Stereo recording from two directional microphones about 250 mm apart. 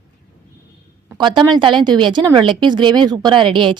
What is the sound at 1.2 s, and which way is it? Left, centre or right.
A woman's voice, centre.